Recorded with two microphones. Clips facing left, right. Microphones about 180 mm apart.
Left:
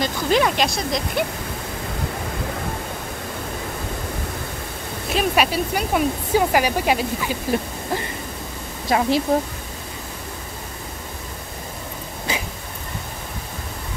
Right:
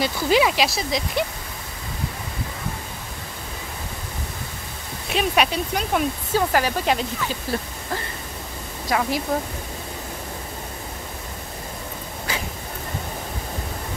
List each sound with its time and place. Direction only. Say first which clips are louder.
0.0 s speech: even; 5° right (ahead or behind)
5.1 s speech: left 1 dB; centre (ahead or behind)
8.8 s speech: left 4 dB; 25° left (ahead or behind)
12.3 s dog: left 3 dB; 20° left (ahead or behind)